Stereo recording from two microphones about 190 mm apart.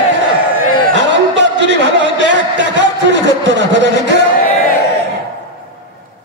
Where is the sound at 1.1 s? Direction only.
65° right (ahead or behind).